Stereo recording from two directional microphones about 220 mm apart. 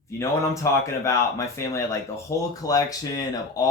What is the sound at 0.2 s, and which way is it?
Speech, 15° left (ahead or behind).